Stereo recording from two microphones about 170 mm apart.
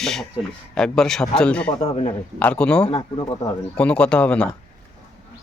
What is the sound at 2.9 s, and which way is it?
Speech, 30° left (ahead or behind).